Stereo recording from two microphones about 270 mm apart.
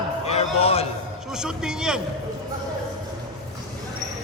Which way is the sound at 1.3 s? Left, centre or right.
Centre.